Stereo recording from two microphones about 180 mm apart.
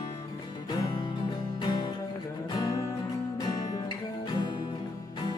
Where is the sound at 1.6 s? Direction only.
25° left (ahead or behind).